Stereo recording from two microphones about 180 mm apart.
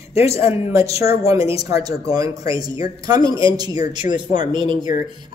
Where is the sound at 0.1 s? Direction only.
35° left (ahead or behind).